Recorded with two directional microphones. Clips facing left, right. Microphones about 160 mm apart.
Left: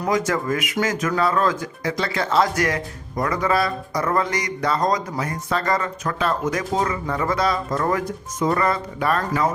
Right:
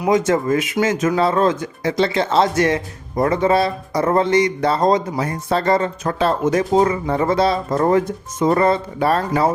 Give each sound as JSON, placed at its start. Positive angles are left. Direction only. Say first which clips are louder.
{"t": 0.1, "sound": "speech", "louder": "right 6 dB", "side_deg": -25}